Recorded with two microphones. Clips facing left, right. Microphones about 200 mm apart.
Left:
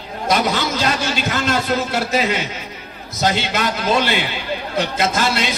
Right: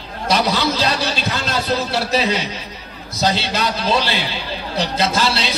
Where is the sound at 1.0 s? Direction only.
30° right (ahead or behind).